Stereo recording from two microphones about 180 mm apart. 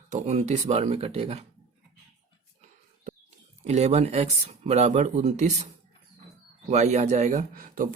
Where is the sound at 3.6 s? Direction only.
40° right (ahead or behind).